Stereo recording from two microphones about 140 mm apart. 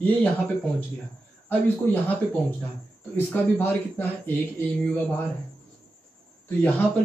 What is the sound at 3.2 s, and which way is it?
Speech, 15° left (ahead or behind).